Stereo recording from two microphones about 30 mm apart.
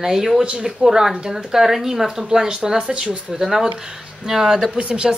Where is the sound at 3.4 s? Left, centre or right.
Centre.